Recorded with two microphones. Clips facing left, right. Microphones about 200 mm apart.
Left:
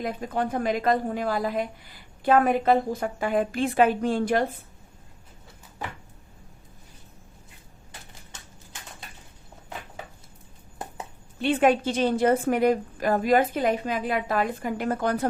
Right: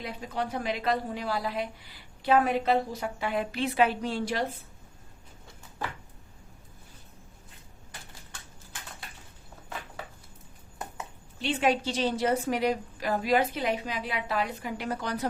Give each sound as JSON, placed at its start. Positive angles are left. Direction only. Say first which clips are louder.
{"t": 0.0, "sound": "a woman's voice", "louder": "left 6 dB", "side_deg": 50}
{"t": 11.3, "sound": "a woman's voice", "louder": "left 6 dB", "side_deg": 55}